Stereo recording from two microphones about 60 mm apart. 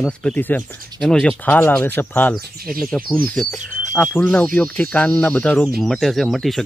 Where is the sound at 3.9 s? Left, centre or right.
Left.